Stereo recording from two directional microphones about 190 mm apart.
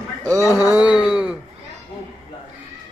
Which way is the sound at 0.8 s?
5° right (ahead or behind).